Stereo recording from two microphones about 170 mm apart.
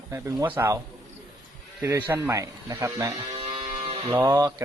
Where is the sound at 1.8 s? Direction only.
15° right (ahead or behind).